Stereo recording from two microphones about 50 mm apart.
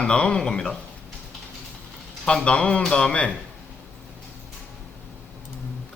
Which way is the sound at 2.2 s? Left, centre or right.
Centre.